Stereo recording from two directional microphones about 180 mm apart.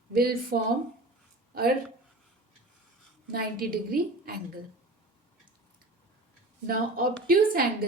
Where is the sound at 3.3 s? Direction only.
55° right (ahead or behind).